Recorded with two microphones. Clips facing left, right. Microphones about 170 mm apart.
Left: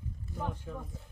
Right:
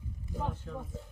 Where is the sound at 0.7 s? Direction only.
5° left (ahead or behind).